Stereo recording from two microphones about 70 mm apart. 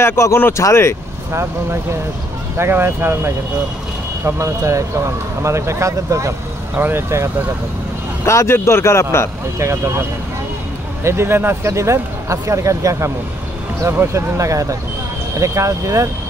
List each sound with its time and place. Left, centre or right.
0.0 s speech: left
1.3 s speech: right
4.2 s speech: right
6.7 s speech: right
8.3 s speech: left
9.6 s speech: right
11.1 s speech: right